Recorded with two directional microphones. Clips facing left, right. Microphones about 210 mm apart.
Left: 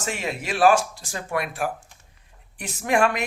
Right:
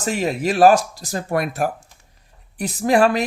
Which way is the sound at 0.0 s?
40° right (ahead or behind).